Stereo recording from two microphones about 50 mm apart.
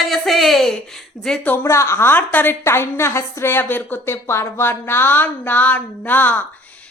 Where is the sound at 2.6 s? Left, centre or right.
Left.